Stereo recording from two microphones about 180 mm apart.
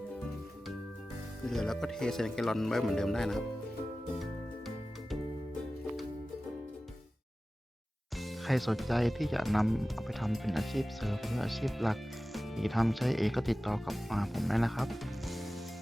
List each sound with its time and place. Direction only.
1.5 s speech: centre (ahead or behind)
8.2 s speech: centre (ahead or behind)